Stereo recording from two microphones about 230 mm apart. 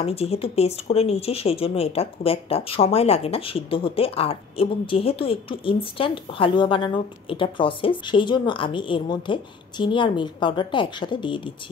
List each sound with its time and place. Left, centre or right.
0.0 s speech: left